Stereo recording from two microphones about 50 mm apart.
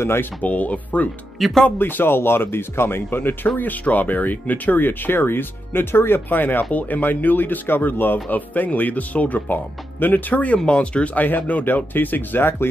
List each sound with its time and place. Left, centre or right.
0.0 s speech: left
0.4 s speech: left
1.4 s speech: centre
1.8 s speech: left
11.2 s speech: left